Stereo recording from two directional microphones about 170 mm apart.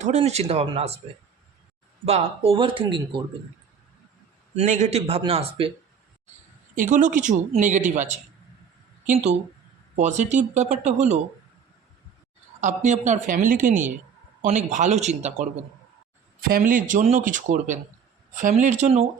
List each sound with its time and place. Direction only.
0.0 s speech: 40° right (ahead or behind)
2.0 s speech: 35° right (ahead or behind)
4.5 s speech: 50° right (ahead or behind)
6.7 s a woman's voice: 50° right (ahead or behind)
9.9 s a woman's voice: 45° right (ahead or behind)
12.5 s a woman's voice: 45° right (ahead or behind)
16.4 s a woman's voice: 55° right (ahead or behind)